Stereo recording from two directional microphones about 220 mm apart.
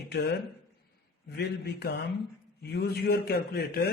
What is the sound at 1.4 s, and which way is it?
A man's voice, 50° left (ahead or behind).